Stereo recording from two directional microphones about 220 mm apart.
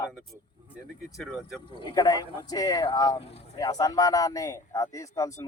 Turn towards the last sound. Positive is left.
turn(degrees=15)  # may be behind; listen again after turning